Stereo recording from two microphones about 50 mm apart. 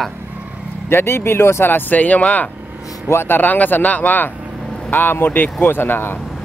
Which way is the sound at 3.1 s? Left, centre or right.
Left.